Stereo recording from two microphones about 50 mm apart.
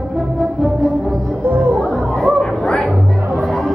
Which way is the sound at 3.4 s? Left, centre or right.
Centre.